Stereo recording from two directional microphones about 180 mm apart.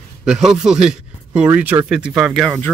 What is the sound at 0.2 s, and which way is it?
Speech, 5° right (ahead or behind).